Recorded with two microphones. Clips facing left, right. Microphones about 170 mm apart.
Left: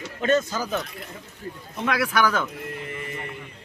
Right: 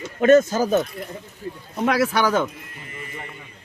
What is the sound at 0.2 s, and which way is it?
Speech, 45° right (ahead or behind).